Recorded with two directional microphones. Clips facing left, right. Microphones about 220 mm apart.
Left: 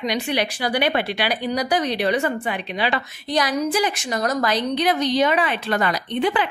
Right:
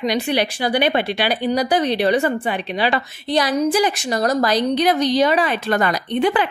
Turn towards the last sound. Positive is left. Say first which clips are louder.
# right 3 dB
turn(degrees=-45)  # may be behind; listen again after turning